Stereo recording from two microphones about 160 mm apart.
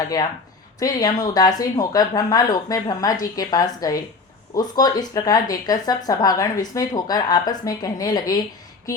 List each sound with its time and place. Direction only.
0.8 s speech: 25° left (ahead or behind)